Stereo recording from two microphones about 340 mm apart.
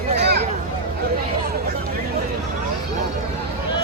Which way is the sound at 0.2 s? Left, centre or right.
Right.